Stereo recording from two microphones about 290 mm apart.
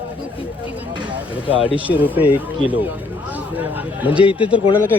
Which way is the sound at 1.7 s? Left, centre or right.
Centre.